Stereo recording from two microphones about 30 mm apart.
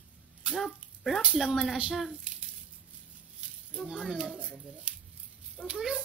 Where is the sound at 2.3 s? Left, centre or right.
Right.